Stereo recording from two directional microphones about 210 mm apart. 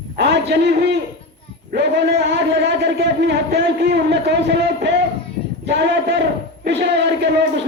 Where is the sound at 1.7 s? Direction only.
55° right (ahead or behind).